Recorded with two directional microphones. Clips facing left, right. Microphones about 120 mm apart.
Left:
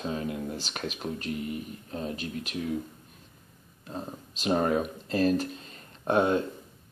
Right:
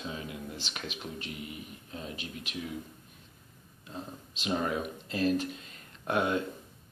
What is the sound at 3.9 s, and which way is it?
Speech, 40° left (ahead or behind).